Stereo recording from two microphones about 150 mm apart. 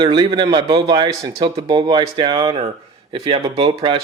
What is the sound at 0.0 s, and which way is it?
Speech, 30° right (ahead or behind).